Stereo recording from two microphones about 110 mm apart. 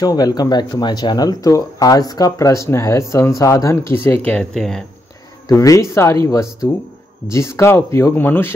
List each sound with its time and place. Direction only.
0.0 s speech: 35° left (ahead or behind); by 4.8 s 5° left (ahead or behind)
5.5 s speech: 30° left (ahead or behind)